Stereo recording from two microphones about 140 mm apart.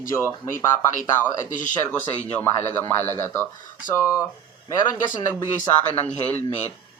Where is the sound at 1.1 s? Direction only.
15° left (ahead or behind).